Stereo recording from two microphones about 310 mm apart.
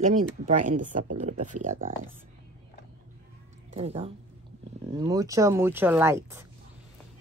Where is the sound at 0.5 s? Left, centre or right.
Right.